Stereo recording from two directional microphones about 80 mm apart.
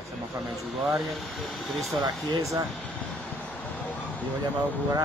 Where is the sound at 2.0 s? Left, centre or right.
Right.